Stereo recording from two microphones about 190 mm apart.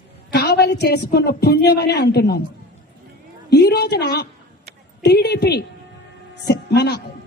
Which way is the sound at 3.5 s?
55° left (ahead or behind).